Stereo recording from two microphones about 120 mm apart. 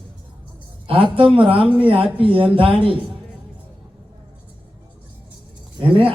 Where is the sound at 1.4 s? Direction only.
50° right (ahead or behind).